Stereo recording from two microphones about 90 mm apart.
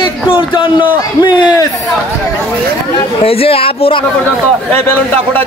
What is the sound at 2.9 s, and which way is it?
Speech, 90° left.